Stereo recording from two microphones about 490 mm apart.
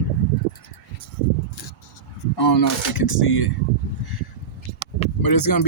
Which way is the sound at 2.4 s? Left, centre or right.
Left.